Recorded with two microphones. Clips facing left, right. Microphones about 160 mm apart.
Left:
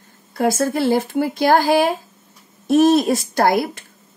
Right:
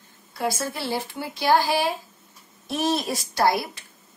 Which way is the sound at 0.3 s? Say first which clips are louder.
Left 9 dB; 50° left (ahead or behind).